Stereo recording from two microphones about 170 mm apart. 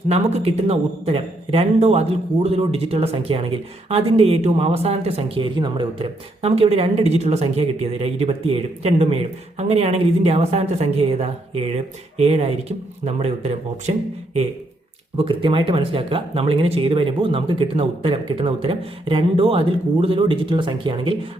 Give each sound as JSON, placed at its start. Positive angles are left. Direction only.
{"t": 0.1, "sound": "speech", "side_deg": -35}
{"t": 15.1, "sound": "speech", "side_deg": -30}